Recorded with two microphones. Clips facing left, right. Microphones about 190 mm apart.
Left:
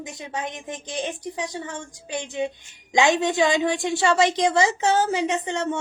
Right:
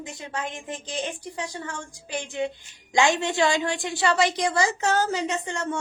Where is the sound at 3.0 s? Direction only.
20° left (ahead or behind).